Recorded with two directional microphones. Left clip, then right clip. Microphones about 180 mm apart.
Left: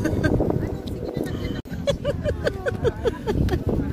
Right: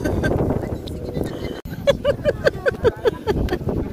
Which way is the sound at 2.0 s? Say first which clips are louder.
Right 7 dB; 25° right (ahead or behind).